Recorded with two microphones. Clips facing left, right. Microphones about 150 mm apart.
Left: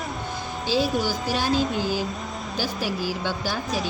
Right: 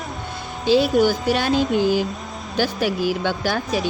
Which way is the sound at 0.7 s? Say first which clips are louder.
Right 8 dB; 60° right (ahead or behind).